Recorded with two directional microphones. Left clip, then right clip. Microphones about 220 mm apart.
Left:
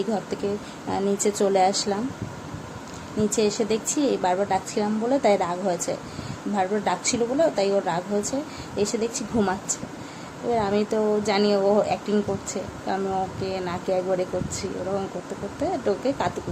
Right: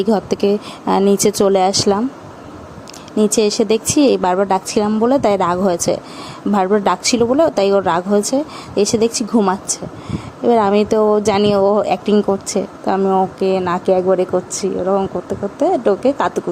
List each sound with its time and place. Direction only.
0.0 s speech: 40° right (ahead or behind)
3.2 s speech: 40° right (ahead or behind)